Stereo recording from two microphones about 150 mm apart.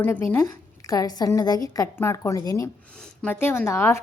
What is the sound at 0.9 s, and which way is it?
A woman's voice, 25° left (ahead or behind).